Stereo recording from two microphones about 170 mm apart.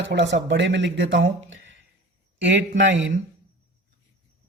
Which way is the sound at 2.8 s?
90° right.